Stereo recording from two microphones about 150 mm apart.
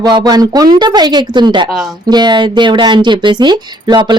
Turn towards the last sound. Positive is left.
turn(degrees=-30)  # may be behind; listen again after turning